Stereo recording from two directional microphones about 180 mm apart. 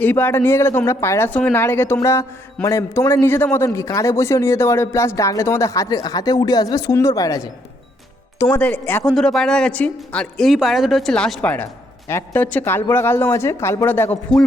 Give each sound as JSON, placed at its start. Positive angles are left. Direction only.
{"t": 0.0, "sound": "speech", "side_deg": 10}